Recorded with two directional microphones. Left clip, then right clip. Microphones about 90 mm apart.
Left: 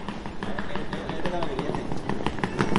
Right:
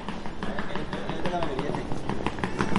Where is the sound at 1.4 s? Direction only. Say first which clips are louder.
Even; 5° left (ahead or behind).